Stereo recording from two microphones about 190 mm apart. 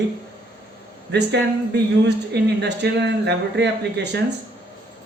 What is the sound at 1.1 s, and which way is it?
Speech, 65° right (ahead or behind).